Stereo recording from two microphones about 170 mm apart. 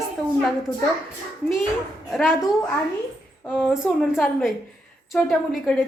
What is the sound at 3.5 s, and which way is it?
A woman's voice, centre (ahead or behind).